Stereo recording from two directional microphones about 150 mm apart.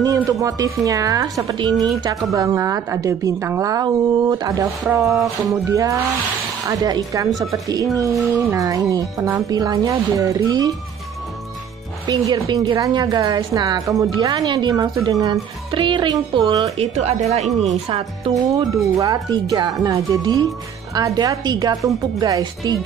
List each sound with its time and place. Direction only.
0.0 s a woman's voice: 25° right (ahead or behind)
4.8 s a sound: 5° right (ahead or behind)
5.5 s a woman's voice: 20° right (ahead or behind)
12.1 s a woman's voice: 25° right (ahead or behind)
16.7 s speech: 45° right (ahead or behind)
18.3 s a woman's voice: 20° right (ahead or behind)